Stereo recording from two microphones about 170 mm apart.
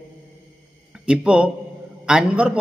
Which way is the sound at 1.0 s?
5° right (ahead or behind).